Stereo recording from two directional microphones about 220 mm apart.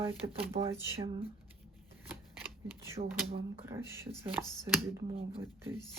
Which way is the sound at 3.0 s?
30° right (ahead or behind).